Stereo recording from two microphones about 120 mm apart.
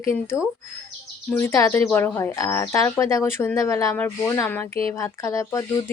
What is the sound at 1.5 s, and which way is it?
Speech, 20° left (ahead or behind).